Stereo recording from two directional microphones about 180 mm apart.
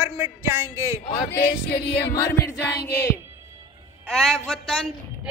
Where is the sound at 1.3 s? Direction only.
65° left (ahead or behind).